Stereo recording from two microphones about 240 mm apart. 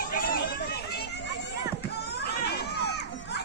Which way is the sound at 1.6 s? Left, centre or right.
Left.